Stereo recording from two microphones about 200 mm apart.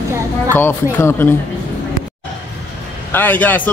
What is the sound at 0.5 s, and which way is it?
Speech, 10° left (ahead or behind).